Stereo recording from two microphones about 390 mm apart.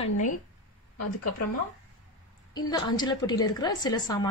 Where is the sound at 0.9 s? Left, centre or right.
Left.